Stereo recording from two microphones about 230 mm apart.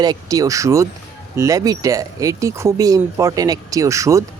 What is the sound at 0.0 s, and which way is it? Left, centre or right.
Speech, centre.